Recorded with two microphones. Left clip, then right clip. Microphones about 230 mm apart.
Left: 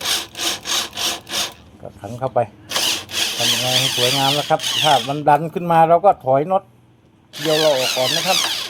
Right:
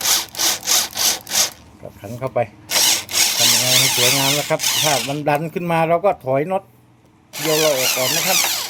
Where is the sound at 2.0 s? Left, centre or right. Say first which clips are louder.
Left 2 dB; centre.